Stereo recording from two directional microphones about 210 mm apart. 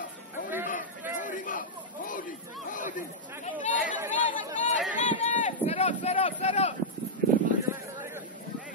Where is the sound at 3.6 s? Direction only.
35° left (ahead or behind).